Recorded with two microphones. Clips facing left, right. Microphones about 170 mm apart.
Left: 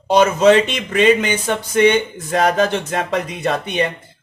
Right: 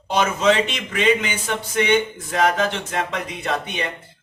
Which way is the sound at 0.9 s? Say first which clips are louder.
Left 6 dB; 40° left (ahead or behind).